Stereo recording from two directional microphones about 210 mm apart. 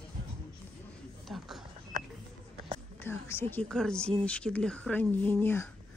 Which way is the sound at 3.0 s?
10° left (ahead or behind).